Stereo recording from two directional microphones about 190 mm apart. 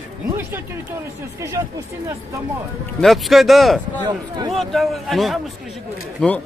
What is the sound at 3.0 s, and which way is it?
Speech, centre (ahead or behind).